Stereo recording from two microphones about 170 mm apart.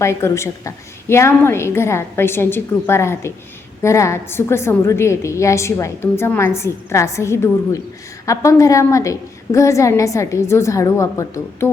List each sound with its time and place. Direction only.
0.0 s a woman's voice: 15° left (ahead or behind)